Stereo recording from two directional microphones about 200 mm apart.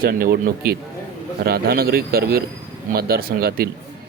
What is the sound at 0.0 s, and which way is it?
Speech, 50° right (ahead or behind).